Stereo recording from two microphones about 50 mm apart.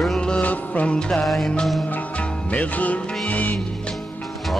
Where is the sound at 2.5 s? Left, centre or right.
Left.